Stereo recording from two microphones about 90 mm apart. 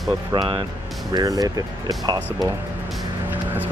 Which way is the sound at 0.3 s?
65° right (ahead or behind).